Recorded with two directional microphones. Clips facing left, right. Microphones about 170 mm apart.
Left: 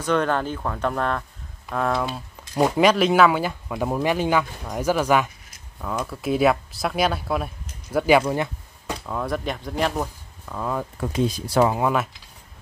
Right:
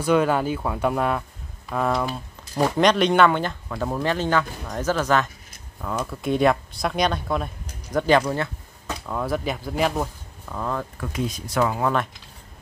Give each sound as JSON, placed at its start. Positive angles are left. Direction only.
{"t": 0.0, "sound": "speech", "side_deg": -10}
{"t": 2.5, "sound": "speech", "side_deg": 10}
{"t": 9.0, "sound": "speech", "side_deg": 0}
{"t": 11.0, "sound": "speech", "side_deg": 30}